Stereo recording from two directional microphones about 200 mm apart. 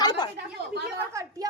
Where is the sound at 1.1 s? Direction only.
15° right (ahead or behind).